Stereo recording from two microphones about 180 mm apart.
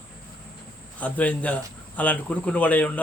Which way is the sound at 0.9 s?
10° left (ahead or behind).